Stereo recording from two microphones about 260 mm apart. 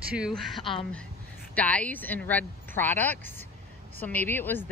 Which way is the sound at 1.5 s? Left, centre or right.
Centre.